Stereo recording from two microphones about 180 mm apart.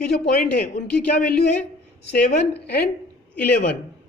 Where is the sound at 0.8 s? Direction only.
5° left (ahead or behind).